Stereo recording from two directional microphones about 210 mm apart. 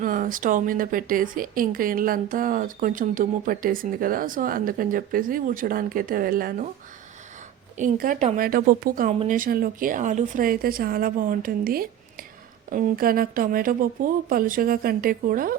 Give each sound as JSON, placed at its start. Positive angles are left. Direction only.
{"t": 0.0, "sound": "a woman's voice", "side_deg": -40}
{"t": 7.8, "sound": "a woman's voice", "side_deg": -40}